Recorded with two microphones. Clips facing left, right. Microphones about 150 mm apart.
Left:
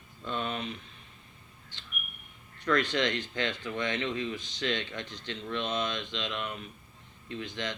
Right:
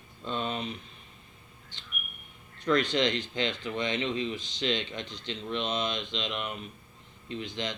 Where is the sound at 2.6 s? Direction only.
25° right (ahead or behind).